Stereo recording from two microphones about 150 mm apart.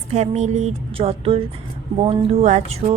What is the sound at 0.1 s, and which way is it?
A woman's voice, 50° right (ahead or behind).